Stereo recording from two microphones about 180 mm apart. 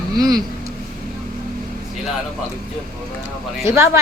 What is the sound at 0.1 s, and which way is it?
Speech, 20° right (ahead or behind).